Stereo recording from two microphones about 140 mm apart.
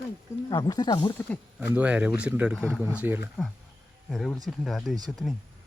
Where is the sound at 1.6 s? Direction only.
10° right (ahead or behind).